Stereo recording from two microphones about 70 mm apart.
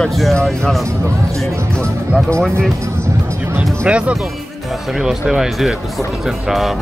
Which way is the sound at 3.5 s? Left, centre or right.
Centre.